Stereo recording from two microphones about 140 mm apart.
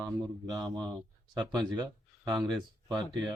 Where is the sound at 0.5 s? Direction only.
30° right (ahead or behind).